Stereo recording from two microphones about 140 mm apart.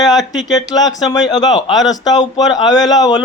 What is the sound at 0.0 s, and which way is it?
Speech, 30° left (ahead or behind).